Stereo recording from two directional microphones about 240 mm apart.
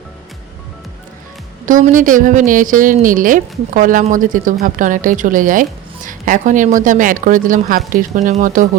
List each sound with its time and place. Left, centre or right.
1.6 s a woman's voice: right